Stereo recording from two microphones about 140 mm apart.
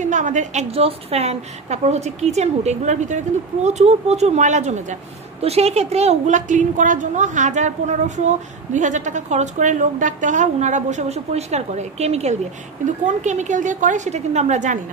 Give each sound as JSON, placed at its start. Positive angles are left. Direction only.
{"t": 0.0, "sound": "a woman's voice", "side_deg": -60}